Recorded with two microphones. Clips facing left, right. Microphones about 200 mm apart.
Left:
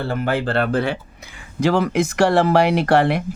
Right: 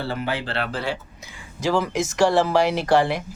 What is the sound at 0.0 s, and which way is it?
Speech, 50° left (ahead or behind).